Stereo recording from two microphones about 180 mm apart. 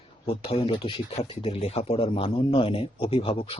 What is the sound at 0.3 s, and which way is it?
Speech, 30° left (ahead or behind).